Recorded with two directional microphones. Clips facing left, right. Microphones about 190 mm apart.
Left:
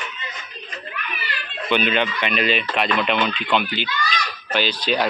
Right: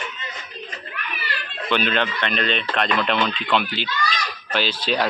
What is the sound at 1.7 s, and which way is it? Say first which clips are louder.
Speech: left 2 dB; 5° left (ahead or behind).